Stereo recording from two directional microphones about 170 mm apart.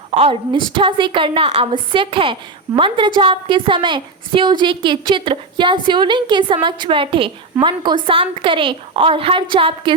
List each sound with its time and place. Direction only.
0.1 s a woman's voice: 35° right (ahead or behind)